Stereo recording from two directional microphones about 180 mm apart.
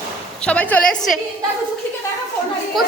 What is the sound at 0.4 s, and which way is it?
Speech, 10° left (ahead or behind).